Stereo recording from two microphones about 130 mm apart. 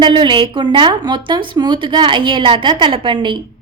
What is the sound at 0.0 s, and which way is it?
A woman's voice, 40° right (ahead or behind).